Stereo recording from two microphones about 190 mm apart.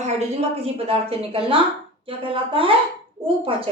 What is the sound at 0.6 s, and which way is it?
A woman's voice, 30° right (ahead or behind).